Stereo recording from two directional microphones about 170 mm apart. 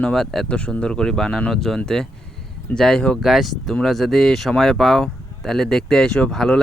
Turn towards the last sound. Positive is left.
turn(degrees=5)  # may be behind; listen again after turning